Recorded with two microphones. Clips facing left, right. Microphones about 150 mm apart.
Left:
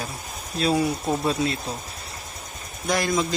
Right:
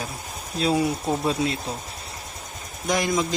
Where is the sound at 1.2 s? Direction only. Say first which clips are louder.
Even; 15° right (ahead or behind).